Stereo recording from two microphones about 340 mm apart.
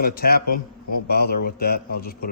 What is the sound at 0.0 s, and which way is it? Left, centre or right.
Speech, left.